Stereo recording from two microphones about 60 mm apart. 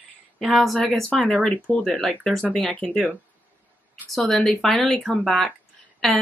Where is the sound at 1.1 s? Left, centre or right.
Left.